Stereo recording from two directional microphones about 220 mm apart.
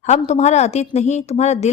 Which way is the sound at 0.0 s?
30° left (ahead or behind).